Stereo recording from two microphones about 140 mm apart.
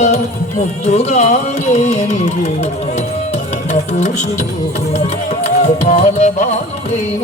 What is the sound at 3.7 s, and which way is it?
Carnatic music, 55° left (ahead or behind).